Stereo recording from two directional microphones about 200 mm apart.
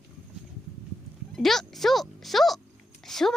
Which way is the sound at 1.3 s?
Centre (ahead or behind).